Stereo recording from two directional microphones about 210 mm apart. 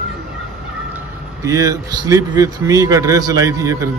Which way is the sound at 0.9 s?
15° right (ahead or behind).